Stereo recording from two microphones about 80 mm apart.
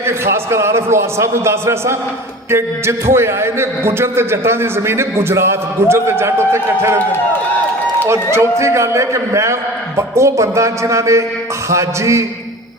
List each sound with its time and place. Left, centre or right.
0.0 s a man's voice: right
8.0 s a man's voice: right